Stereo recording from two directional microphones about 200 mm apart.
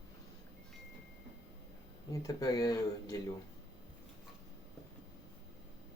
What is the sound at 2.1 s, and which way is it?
Speech, 15° left (ahead or behind).